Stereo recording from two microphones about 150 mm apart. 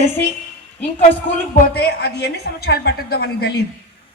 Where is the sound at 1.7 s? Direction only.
90° left.